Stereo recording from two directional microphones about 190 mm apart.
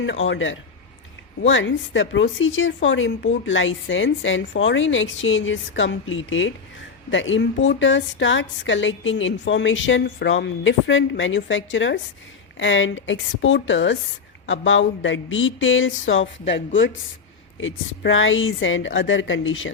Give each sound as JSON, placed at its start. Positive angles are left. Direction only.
{"t": 0.0, "sound": "speech", "side_deg": 75}
{"t": 7.1, "sound": "speech", "side_deg": 75}
{"t": 16.5, "sound": "speech", "side_deg": 75}
{"t": 17.6, "sound": "a woman's voice", "side_deg": 90}